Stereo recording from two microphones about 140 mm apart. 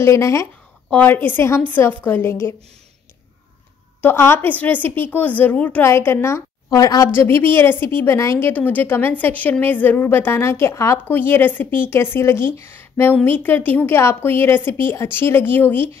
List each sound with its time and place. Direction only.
0.0 s a woman's voice: 20° left (ahead or behind)
4.0 s a woman's voice: 15° left (ahead or behind)